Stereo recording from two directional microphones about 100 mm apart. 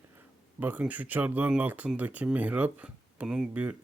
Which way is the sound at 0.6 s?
15° right (ahead or behind).